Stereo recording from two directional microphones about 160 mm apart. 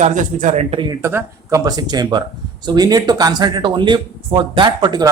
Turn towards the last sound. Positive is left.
turn(degrees=-25)  # may be behind; listen again after turning